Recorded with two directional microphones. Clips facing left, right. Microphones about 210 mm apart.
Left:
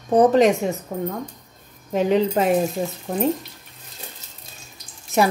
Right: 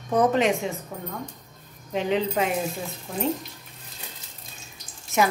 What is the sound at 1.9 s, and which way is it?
Speech, 45° left (ahead or behind).